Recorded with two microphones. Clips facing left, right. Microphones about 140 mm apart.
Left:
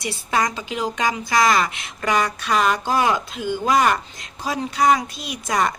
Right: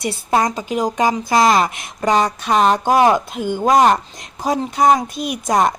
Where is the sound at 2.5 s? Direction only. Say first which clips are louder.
Right 6 dB; 40° right (ahead or behind).